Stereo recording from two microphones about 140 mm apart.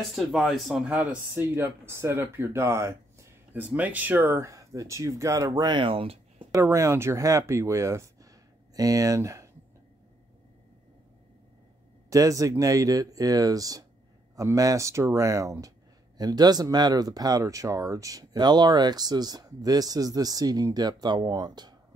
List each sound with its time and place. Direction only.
0.1 s speech: centre (ahead or behind); by 6.4 s 45° right (ahead or behind)
6.5 s speech: 20° right (ahead or behind)
12.1 s speech: 25° right (ahead or behind)